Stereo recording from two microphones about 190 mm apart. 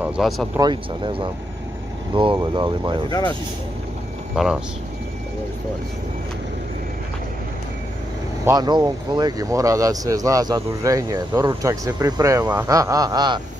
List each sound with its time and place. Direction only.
0.0 s speech: centre (ahead or behind)
0.6 s speech: 25° right (ahead or behind)
2.3 s speech: 20° right (ahead or behind)
3.1 s speech: 20° left (ahead or behind)
4.4 s speech: 5° right (ahead or behind)
8.5 s speech: 20° right (ahead or behind)